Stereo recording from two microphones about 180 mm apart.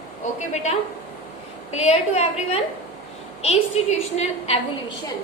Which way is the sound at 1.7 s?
35° left (ahead or behind).